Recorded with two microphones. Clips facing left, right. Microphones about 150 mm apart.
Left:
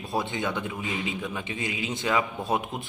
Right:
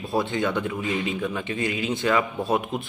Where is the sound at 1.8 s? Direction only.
55° right (ahead or behind).